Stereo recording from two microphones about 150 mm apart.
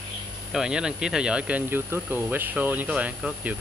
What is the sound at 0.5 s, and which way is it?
Speech, 5° right (ahead or behind).